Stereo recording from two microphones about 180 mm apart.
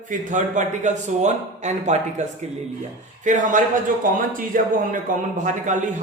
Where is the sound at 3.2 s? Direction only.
45° right (ahead or behind).